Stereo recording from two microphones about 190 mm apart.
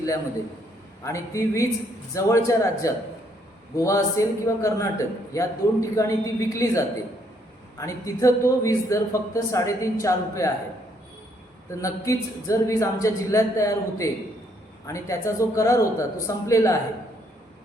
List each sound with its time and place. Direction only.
1.0 s a man's voice: 15° left (ahead or behind)
11.7 s a man's voice: 15° left (ahead or behind)